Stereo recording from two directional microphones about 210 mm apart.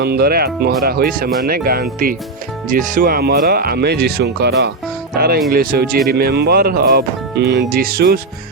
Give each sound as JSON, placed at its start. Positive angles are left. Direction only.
{"t": 0.0, "sound": "speech", "side_deg": -50}